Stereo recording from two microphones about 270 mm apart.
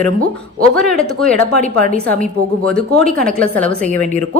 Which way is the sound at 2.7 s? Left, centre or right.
Centre.